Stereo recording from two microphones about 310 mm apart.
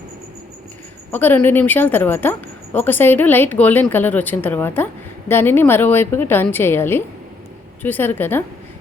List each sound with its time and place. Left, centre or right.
1.1 s a woman's voice: centre